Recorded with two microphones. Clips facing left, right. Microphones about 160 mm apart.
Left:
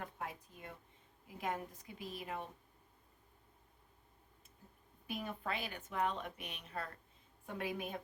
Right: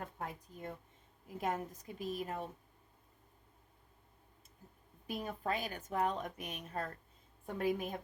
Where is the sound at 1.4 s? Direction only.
45° right (ahead or behind).